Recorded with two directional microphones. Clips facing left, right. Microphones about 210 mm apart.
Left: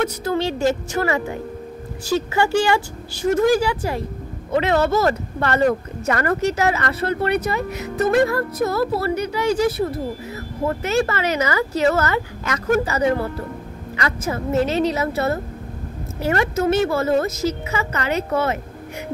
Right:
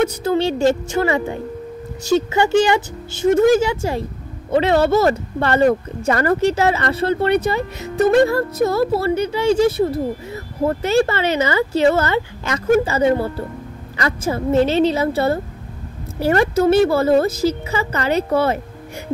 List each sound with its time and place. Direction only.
0.0 s a woman's voice: 30° right (ahead or behind)